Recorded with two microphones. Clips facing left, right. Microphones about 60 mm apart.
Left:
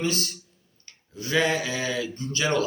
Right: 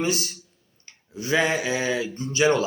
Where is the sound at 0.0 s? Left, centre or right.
Centre.